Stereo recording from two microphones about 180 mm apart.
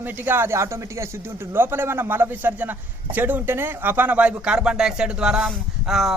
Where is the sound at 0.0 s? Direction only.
10° right (ahead or behind).